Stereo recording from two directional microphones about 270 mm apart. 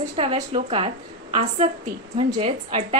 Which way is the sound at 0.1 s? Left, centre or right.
Right.